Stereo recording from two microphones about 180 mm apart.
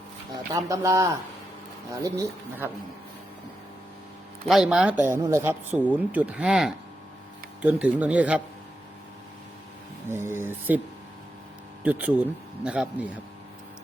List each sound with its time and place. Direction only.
0.5 s a man's voice: 20° right (ahead or behind)
4.4 s a man's voice: centre (ahead or behind)
10.1 s a man's voice: 15° right (ahead or behind)
11.8 s a man's voice: 10° right (ahead or behind)